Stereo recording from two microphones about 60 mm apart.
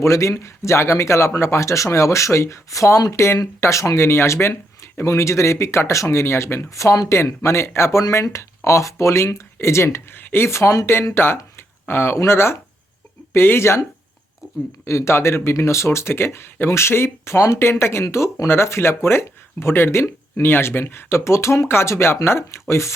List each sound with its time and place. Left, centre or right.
0.0 s speech: left
7.3 s speech: left
14.4 s a sound: left
14.8 s speech: left